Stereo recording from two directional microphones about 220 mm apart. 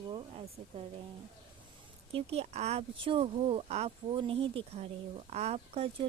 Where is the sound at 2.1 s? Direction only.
25° right (ahead or behind).